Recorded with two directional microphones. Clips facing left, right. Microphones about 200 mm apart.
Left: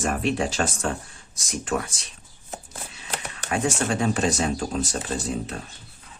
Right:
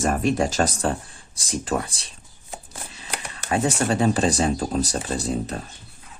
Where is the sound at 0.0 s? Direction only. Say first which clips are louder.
Right 3 dB; 40° right (ahead or behind).